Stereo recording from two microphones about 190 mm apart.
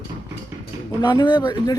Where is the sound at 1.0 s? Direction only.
20° left (ahead or behind).